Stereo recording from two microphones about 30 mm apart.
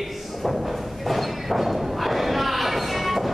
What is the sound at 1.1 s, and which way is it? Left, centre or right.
Thump, centre.